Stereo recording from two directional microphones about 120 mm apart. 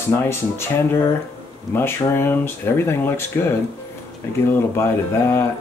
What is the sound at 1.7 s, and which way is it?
Speech, 20° left (ahead or behind).